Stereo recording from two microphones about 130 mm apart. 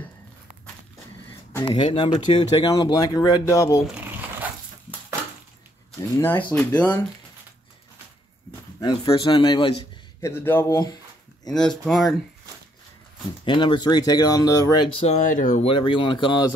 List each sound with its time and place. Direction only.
1.6 s speech: 40° left (ahead or behind); by 3.8 s 25° left (ahead or behind)
6.1 s speech: 15° left (ahead or behind)
8.7 s speech: 30° left (ahead or behind)
10.2 s speech: 15° left (ahead or behind)
11.8 s speech: centre (ahead or behind)
13.5 s speech: 40° left (ahead or behind)
15.0 s speech: 75° left (ahead or behind)
15.6 s speech: 45° left (ahead or behind)